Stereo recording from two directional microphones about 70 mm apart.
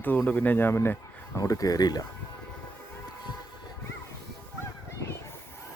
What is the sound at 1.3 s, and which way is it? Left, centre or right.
Speech, left.